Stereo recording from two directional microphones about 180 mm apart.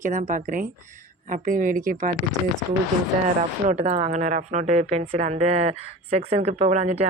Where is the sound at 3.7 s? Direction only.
40° right (ahead or behind).